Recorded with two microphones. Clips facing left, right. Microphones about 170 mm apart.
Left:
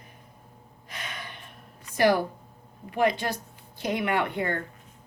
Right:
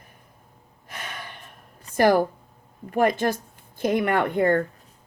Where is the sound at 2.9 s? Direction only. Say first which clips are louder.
Right 4 dB; 50° right (ahead or behind).